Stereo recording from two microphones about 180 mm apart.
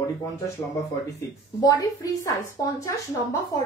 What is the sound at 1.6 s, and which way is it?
Speech, 20° left (ahead or behind).